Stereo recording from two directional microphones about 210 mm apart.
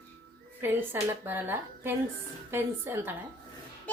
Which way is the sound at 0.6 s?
10° right (ahead or behind).